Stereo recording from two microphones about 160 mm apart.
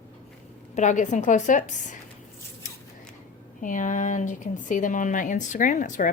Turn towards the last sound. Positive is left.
turn(degrees=50)  # may be behind; listen again after turning